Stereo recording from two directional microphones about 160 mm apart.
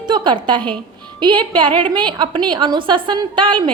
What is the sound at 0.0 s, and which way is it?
A woman's voice, 30° right (ahead or behind).